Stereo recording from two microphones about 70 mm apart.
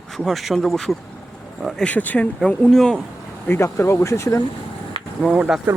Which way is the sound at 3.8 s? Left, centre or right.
Left.